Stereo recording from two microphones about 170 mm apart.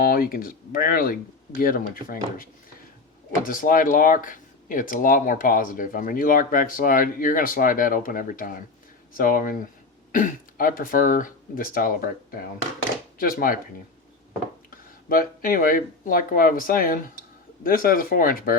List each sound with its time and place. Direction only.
0.0 s speech: 60° left (ahead or behind)
15.1 s speech: 60° left (ahead or behind)